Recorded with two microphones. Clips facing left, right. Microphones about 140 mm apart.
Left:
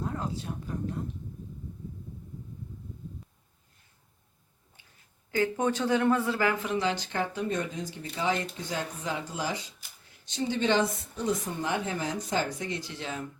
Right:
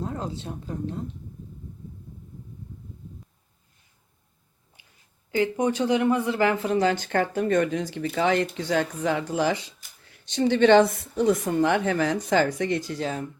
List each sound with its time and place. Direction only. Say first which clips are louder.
0.0 s a woman's voice: right 2 dB; 25° right (ahead or behind)
4.8 s a sound: right 1 dB; 15° right (ahead or behind)
5.3 s a woman's voice: right 4 dB; 15° right (ahead or behind)
6.6 s speech: right 6 dB; 40° right (ahead or behind); by 12.8 s 70° right (ahead or behind)
12.8 s speech: right 7 dB; 40° right (ahead or behind)